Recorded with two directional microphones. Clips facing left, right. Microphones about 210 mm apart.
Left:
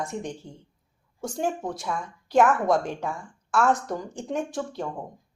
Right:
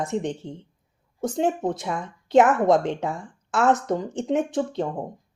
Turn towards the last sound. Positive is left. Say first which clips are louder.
# right 6 dB
turn(degrees=-20)  # may be behind; listen again after turning